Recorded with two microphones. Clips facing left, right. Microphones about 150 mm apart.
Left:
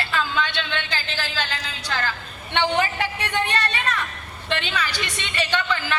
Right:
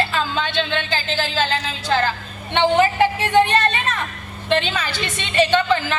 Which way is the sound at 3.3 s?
50° right (ahead or behind).